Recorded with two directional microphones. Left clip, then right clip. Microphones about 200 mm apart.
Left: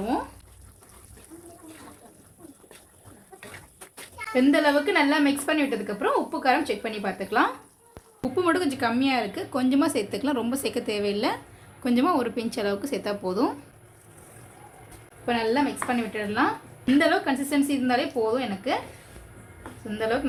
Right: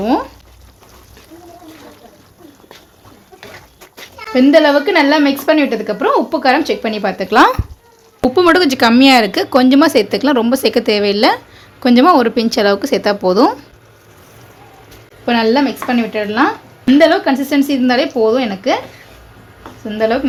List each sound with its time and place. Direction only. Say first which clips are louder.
4.4 s speech: right 12 dB; 30° right (ahead or behind)
15.3 s speech: right 11 dB; 45° right (ahead or behind)
20.0 s speech: right 12 dB; 35° right (ahead or behind)